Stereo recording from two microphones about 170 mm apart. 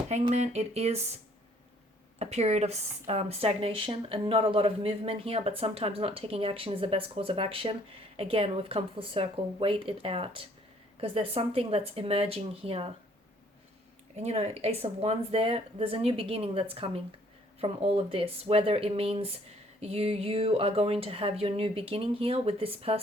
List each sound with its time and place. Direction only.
0.1 s speech: 40° right (ahead or behind)
14.2 s speech: 40° right (ahead or behind)